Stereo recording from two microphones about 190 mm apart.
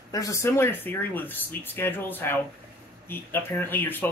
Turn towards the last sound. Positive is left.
turn(degrees=10)  # may be behind; listen again after turning